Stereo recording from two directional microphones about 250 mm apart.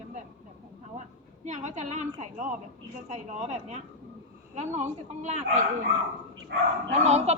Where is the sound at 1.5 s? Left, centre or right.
Right.